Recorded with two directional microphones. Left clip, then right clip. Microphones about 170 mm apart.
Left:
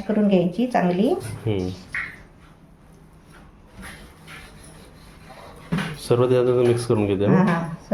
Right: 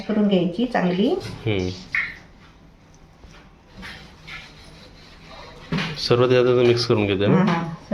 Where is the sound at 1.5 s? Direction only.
5° left (ahead or behind).